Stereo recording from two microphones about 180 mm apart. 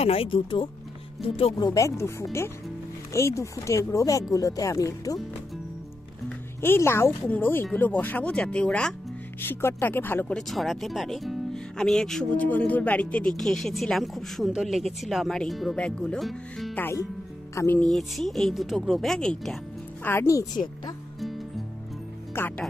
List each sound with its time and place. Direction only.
0.0 s speech: 30° left (ahead or behind)
6.2 s speech: 10° left (ahead or behind)
22.3 s speech: 10° left (ahead or behind)